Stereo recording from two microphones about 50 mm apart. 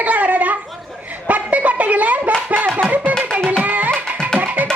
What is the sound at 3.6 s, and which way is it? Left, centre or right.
Music, right.